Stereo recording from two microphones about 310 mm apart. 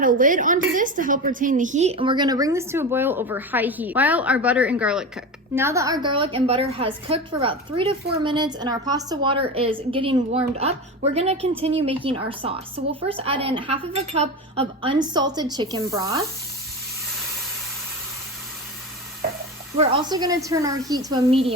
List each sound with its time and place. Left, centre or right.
0.0 s a woman's voice: right; by 16.2 s centre
19.7 s a woman's voice: centre